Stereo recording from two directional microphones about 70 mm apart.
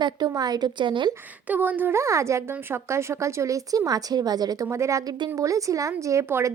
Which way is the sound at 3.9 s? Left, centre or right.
Right.